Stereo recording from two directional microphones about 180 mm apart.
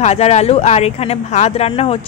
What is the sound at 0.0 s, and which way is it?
Speech, 40° left (ahead or behind).